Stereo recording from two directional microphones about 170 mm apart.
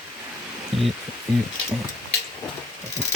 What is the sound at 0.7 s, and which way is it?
Speech, 35° right (ahead or behind).